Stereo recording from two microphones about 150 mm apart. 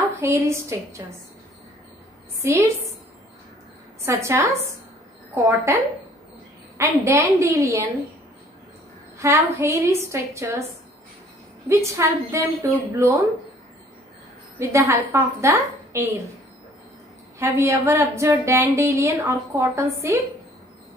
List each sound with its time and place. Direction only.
0.2 s a woman's voice: 20° right (ahead or behind)
2.4 s a woman's voice: 20° right (ahead or behind)
4.0 s a woman's voice: 20° right (ahead or behind)
6.8 s a woman's voice: 20° right (ahead or behind)
9.2 s a woman's voice: 20° right (ahead or behind)
11.7 s a woman's voice: 20° right (ahead or behind)
14.6 s a woman's voice: 20° right (ahead or behind)
17.4 s a woman's voice: 20° right (ahead or behind)